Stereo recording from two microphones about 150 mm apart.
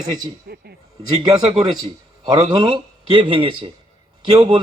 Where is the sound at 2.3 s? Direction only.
30° right (ahead or behind).